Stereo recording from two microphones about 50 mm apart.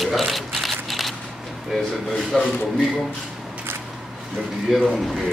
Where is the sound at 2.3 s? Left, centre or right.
Centre.